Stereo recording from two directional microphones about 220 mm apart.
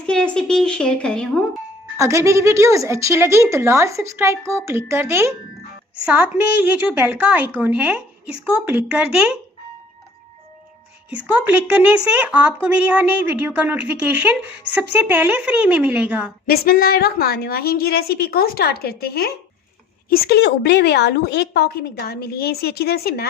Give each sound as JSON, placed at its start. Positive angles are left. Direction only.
{"t": 0.0, "sound": "a woman's voice", "side_deg": 5}
{"t": 2.0, "sound": "a woman's voice", "side_deg": -15}
{"t": 11.4, "sound": "a woman's voice", "side_deg": -10}
{"t": 16.5, "sound": "a woman's voice", "side_deg": 45}